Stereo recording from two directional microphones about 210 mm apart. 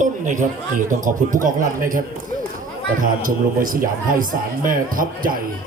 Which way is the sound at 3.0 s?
40° right (ahead or behind).